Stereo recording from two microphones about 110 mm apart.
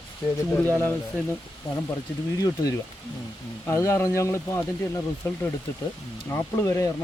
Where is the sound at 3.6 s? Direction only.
25° left (ahead or behind).